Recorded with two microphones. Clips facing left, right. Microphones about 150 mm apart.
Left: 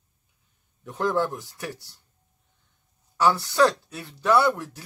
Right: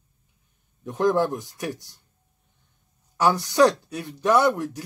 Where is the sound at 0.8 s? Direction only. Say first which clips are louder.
Right 4 dB; 15° right (ahead or behind).